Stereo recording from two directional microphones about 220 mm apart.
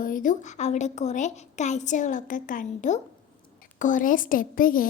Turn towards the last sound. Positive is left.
turn(degrees=40)  # may be behind; listen again after turning